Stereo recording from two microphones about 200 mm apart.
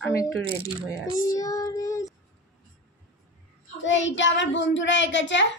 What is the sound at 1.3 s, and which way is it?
Child singing, 15° left (ahead or behind).